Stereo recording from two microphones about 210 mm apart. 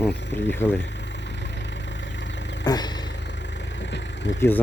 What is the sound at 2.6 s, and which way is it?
Vehicle, 20° left (ahead or behind).